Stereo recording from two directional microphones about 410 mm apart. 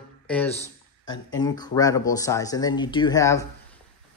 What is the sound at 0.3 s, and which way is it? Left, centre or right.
Speech, centre.